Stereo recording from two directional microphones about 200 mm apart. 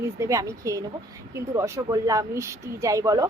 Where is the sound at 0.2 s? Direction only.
15° right (ahead or behind).